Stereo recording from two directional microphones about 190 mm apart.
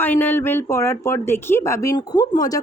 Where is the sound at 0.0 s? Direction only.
10° left (ahead or behind).